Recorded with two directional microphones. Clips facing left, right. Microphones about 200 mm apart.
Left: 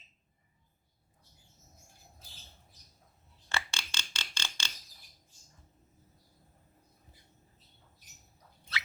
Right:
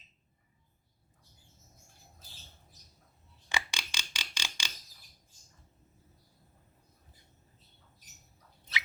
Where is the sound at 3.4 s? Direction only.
15° right (ahead or behind).